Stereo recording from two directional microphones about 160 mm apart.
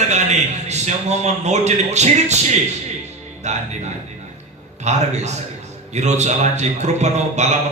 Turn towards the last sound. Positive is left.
turn(degrees=-45)  # may be behind; listen again after turning